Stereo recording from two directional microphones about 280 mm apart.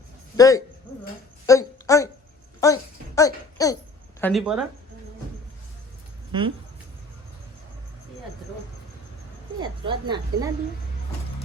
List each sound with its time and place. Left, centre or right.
0.3 s a woman's voice: centre
3.2 s a sound: centre
4.2 s speech: centre
6.3 s speech: centre
9.6 s speech: centre